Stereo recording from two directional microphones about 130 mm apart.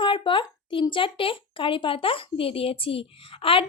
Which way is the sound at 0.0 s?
40° left (ahead or behind).